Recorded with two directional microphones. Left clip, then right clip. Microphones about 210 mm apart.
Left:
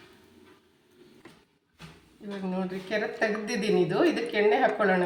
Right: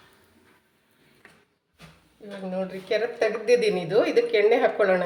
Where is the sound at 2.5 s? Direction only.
35° right (ahead or behind).